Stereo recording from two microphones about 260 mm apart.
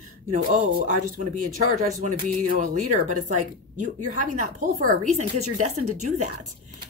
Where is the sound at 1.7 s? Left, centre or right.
Right.